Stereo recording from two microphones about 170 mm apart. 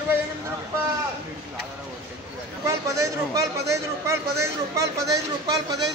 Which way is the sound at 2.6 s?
20° right (ahead or behind).